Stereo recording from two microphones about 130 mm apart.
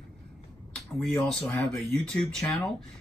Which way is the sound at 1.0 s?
5° left (ahead or behind).